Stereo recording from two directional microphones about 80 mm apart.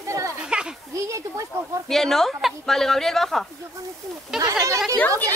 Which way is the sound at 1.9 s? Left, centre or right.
Centre.